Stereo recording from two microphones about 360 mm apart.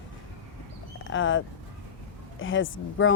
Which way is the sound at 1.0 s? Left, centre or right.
Left.